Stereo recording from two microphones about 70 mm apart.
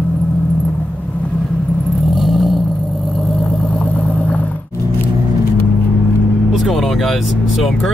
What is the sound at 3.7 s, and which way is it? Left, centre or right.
Vehicle, left.